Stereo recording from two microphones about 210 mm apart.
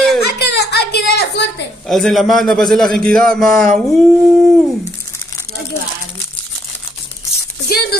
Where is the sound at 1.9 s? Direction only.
Centre (ahead or behind).